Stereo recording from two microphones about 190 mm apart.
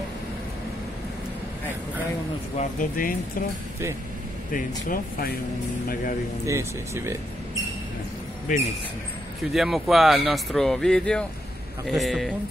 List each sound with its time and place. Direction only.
2.5 s speech: 40° left (ahead or behind)
4.5 s speech: 45° left (ahead or behind)
6.4 s speech: 15° right (ahead or behind)
8.5 s speech: 45° left (ahead or behind)
9.5 s speech: centre (ahead or behind)